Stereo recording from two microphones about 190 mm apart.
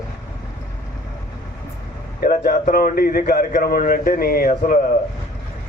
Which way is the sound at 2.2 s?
45° left (ahead or behind).